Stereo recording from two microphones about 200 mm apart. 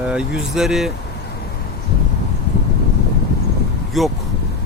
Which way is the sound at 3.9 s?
Centre (ahead or behind).